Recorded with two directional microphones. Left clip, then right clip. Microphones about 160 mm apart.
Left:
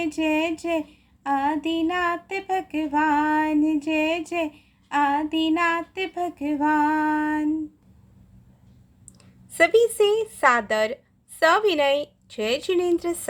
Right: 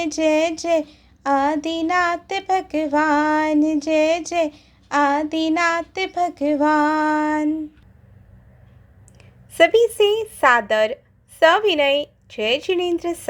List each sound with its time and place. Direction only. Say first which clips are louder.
0.0 s child singing: right 5 dB; 15° right (ahead or behind)
9.5 s a woman's voice: right 3 dB; 5° left (ahead or behind)